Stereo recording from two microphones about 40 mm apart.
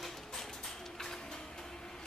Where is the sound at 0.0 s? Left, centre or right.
Centre.